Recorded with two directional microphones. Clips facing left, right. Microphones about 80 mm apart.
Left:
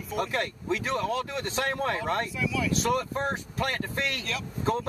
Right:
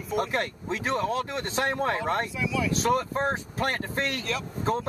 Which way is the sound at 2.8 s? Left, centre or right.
Right.